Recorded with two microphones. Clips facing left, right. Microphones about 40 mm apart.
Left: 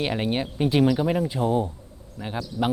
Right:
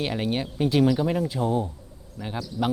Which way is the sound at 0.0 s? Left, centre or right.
Centre.